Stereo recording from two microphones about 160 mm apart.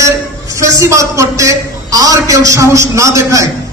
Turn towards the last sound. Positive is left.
turn(degrees=-20)  # may be behind; listen again after turning